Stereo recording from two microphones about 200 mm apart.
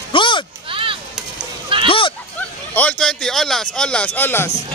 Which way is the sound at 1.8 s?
25° left (ahead or behind).